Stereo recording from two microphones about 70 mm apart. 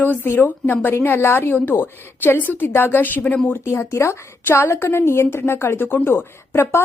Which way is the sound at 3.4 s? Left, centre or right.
Left.